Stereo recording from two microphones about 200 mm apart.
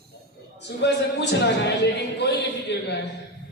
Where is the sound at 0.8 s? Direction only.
60° left (ahead or behind).